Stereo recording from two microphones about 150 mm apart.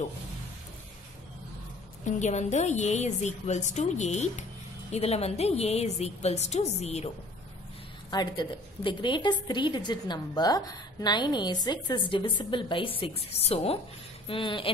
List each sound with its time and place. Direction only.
2.0 s a woman's voice: 50° left (ahead or behind)
8.1 s a woman's voice: 30° left (ahead or behind)